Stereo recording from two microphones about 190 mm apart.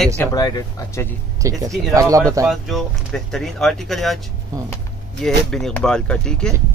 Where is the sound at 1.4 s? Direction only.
15° right (ahead or behind).